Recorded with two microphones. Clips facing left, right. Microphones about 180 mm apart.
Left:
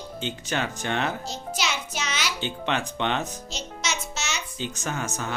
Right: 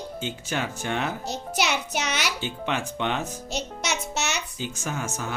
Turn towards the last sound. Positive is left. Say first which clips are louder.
# even
turn(degrees=-10)  # may be behind; listen again after turning